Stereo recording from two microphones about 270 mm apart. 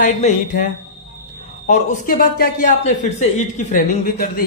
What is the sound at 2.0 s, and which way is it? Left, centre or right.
Speech, left.